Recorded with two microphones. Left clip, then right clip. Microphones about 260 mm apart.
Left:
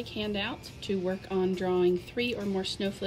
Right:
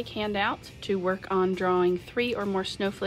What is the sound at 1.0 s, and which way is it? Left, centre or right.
Speech, right.